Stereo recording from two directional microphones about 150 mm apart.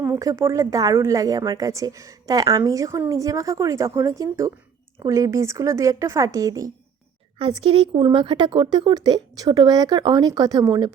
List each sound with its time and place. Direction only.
0.0 s a woman's voice: 20° right (ahead or behind)
7.3 s a woman's voice: 35° right (ahead or behind)